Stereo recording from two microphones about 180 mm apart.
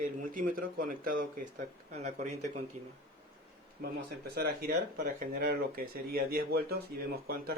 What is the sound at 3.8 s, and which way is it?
Speech, 60° right (ahead or behind).